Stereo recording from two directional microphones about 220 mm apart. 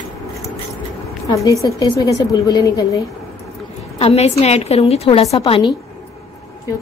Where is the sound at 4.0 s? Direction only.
30° left (ahead or behind).